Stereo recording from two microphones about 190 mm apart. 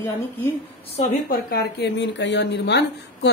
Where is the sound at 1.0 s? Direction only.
45° left (ahead or behind).